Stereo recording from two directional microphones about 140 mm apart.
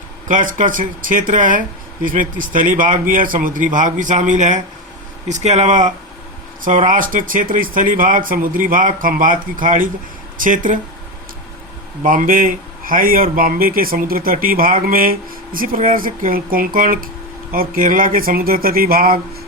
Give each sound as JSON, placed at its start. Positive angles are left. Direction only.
{"t": 0.3, "sound": "speech", "side_deg": -70}
{"t": 6.7, "sound": "speech", "side_deg": -70}
{"t": 12.0, "sound": "speech", "side_deg": -75}